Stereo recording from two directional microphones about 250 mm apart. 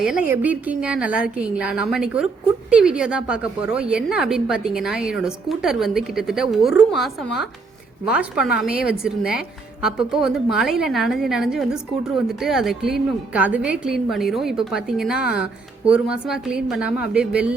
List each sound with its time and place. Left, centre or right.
0.0 s a woman's voice: centre